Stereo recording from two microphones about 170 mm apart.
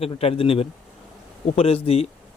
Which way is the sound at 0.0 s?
35° left (ahead or behind).